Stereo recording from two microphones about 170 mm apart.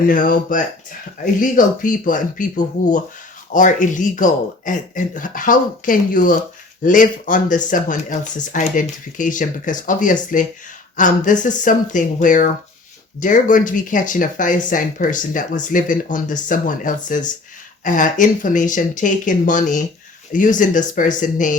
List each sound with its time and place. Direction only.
0.1 s speech: 55° left (ahead or behind)